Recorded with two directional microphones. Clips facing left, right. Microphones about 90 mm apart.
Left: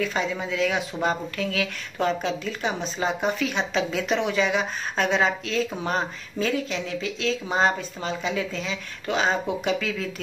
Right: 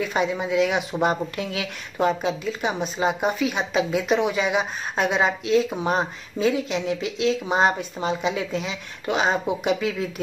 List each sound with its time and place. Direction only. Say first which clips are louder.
0.0 s speech: right 3 dB; 15° right (ahead or behind)